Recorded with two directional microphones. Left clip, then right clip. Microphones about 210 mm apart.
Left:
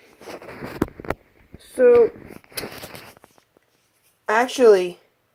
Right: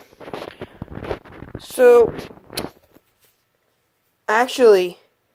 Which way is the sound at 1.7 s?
25° right (ahead or behind).